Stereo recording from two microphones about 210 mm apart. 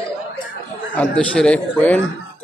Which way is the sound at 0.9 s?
5° left (ahead or behind).